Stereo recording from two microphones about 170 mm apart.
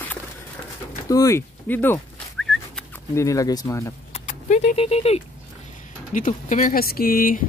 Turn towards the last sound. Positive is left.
turn(degrees=60)  # may be behind; listen again after turning